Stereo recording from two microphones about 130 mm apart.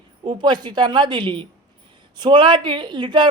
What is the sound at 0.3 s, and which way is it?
Speech, 35° right (ahead or behind).